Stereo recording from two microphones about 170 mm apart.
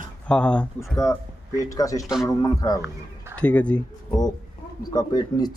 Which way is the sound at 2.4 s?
20° left (ahead or behind).